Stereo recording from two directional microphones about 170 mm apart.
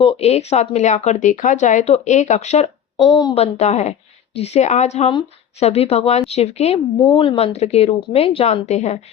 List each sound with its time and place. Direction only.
0.0 s speech: 35° left (ahead or behind)
3.0 s a woman's voice: 25° left (ahead or behind)
3.4 s a woman's voice: 40° left (ahead or behind)